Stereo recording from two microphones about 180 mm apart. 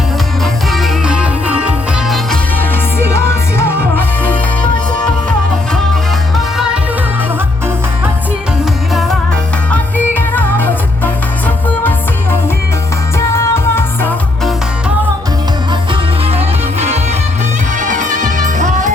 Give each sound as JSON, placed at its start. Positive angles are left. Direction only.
{"t": 0.4, "sound": "music", "side_deg": 0}
{"t": 8.9, "sound": "music", "side_deg": 0}
{"t": 15.9, "sound": "music", "side_deg": -35}